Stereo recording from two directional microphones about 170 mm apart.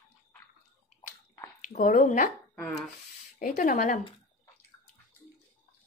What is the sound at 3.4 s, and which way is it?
Speech, 50° left (ahead or behind).